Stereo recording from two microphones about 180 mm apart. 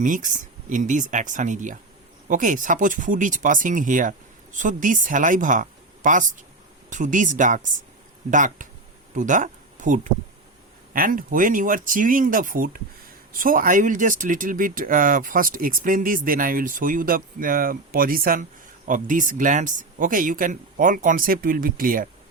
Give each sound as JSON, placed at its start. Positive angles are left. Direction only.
{"t": 0.0, "sound": "speech", "side_deg": -45}